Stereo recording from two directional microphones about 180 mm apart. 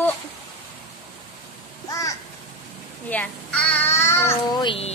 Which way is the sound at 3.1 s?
5° left (ahead or behind).